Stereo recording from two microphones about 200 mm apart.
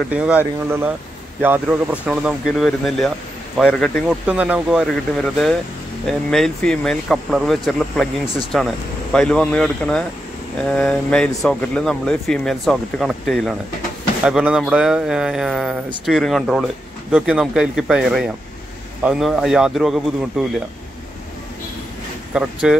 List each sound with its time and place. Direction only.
0.1 s speech: 5° right (ahead or behind)
22.3 s speech: 5° right (ahead or behind)